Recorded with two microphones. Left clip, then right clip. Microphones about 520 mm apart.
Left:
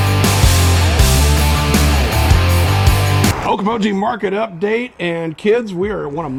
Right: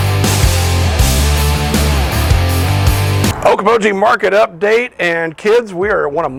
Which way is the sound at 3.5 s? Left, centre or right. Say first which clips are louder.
Right 7 dB; right.